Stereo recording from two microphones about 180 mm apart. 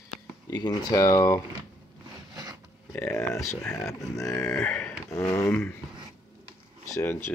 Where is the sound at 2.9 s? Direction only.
5° left (ahead or behind).